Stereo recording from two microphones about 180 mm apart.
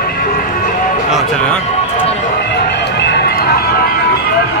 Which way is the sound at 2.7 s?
70° left (ahead or behind).